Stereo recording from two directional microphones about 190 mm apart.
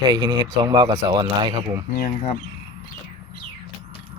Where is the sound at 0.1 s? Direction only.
20° right (ahead or behind).